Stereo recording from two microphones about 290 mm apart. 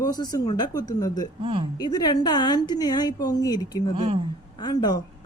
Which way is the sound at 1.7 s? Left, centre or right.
Centre.